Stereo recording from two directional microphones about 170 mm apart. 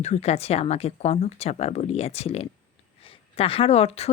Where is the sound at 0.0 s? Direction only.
40° left (ahead or behind).